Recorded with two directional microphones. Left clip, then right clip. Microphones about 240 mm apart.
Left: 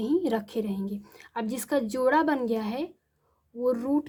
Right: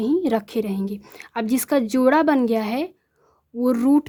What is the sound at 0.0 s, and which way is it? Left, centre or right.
A woman's voice, right.